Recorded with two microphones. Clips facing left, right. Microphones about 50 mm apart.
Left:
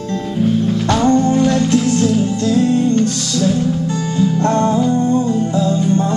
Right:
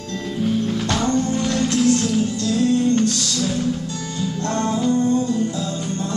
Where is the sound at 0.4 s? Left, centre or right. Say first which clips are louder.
Left 5 dB; centre.